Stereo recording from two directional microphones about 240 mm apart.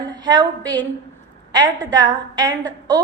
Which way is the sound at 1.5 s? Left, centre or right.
Centre.